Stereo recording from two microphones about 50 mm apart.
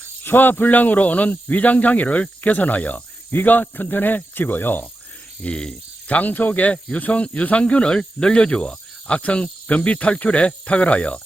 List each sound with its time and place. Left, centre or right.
0.3 s speech: left
5.4 s speech: left
6.1 s speech: left